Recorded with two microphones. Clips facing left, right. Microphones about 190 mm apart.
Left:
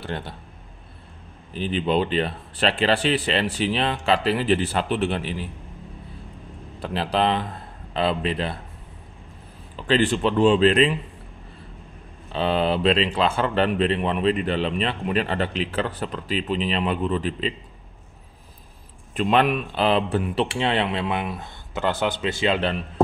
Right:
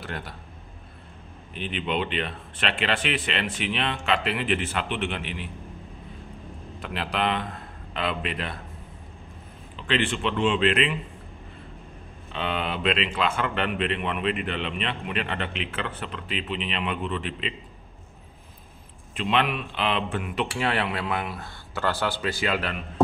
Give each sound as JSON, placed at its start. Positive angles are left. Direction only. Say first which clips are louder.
{"t": 0.0, "sound": "speech", "louder": "left 4 dB", "side_deg": 25}
{"t": 1.5, "sound": "speech", "louder": "left 6 dB", "side_deg": 35}
{"t": 6.8, "sound": "speech", "louder": "left 5 dB", "side_deg": 30}
{"t": 9.8, "sound": "speech", "louder": "left 6 dB", "side_deg": 35}
{"t": 12.3, "sound": "speech", "louder": "left 7 dB", "side_deg": 35}
{"t": 19.1, "sound": "speech", "louder": "left 5 dB", "side_deg": 45}